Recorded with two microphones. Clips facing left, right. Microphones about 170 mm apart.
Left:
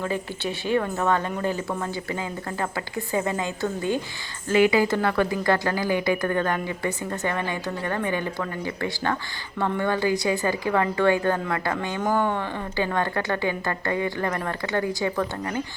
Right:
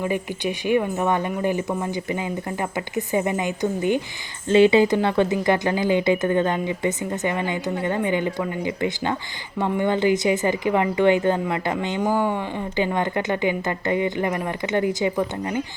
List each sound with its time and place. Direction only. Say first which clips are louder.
0.0 s speech: right 3 dB; 15° right (ahead or behind)